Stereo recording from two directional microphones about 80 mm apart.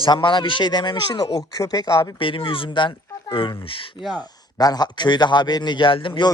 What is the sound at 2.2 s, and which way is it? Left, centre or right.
Speech, left.